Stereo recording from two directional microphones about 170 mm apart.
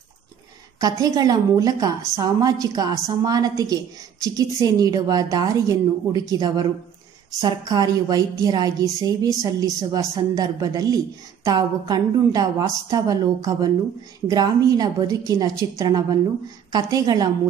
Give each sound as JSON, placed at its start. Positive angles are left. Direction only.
{"t": 0.7, "sound": "a woman's voice", "side_deg": -20}